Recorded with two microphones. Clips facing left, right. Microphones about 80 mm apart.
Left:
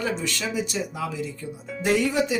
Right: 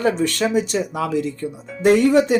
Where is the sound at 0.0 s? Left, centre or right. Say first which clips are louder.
Right 9 dB; right.